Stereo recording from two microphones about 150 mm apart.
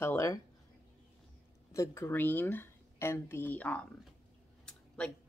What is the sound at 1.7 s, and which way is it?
Speech, 20° left (ahead or behind).